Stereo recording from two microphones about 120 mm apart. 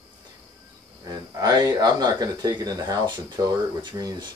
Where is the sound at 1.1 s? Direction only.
30° right (ahead or behind).